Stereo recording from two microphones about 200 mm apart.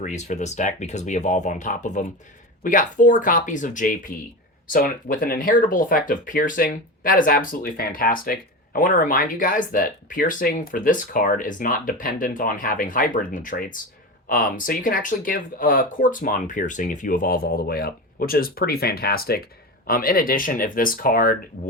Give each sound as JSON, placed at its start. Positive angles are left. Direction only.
{"t": 0.0, "sound": "speech", "side_deg": 35}